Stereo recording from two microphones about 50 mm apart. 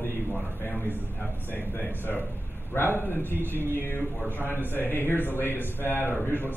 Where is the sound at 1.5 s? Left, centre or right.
Left.